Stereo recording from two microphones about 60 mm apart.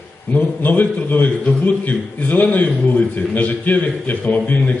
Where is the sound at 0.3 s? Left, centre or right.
Left.